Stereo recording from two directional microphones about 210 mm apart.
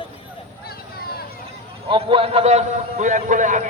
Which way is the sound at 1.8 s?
25° right (ahead or behind).